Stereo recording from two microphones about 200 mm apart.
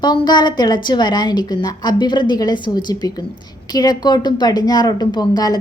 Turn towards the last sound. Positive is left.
turn(degrees=20)  # may be behind; listen again after turning